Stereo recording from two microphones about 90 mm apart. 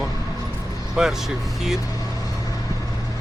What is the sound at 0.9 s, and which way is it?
Speech, 5° right (ahead or behind).